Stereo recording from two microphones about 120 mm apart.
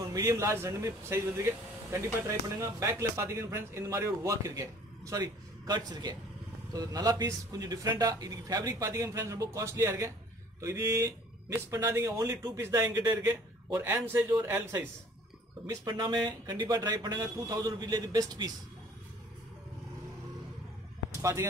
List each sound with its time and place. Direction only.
0.1 s speech: 25° right (ahead or behind)
15.6 s a man's voice: 30° right (ahead or behind)
21.1 s speech: 25° right (ahead or behind)